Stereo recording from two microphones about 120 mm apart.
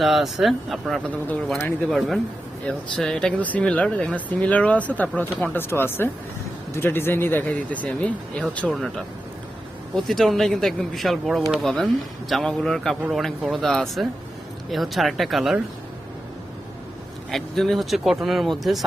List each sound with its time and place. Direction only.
0.0 s speech: centre (ahead or behind)
1.3 s speech: 15° left (ahead or behind)
1.9 s speech: centre (ahead or behind)
8.7 s speech: centre (ahead or behind)
17.3 s speech: centre (ahead or behind)